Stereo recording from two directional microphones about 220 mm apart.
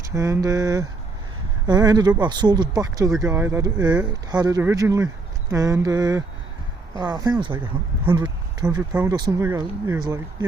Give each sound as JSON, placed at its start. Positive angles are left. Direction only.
{"t": 0.0, "sound": "speech", "side_deg": -15}
{"t": 8.9, "sound": "speech", "side_deg": -5}